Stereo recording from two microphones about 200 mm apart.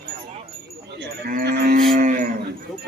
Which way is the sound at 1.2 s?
50° right (ahead or behind).